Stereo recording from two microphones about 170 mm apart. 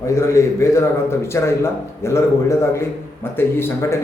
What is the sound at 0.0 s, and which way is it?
A man's voice, 15° left (ahead or behind).